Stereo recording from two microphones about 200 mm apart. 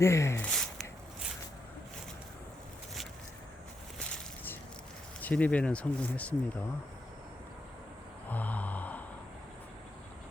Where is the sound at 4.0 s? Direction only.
10° left (ahead or behind).